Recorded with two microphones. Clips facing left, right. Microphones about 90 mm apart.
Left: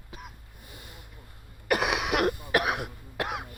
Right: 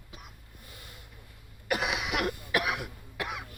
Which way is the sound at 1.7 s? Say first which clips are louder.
Left 4 dB; 65° left (ahead or behind).